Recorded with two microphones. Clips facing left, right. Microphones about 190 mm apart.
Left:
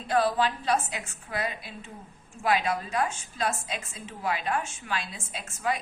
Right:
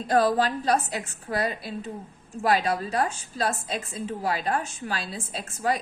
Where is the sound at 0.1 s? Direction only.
40° right (ahead or behind).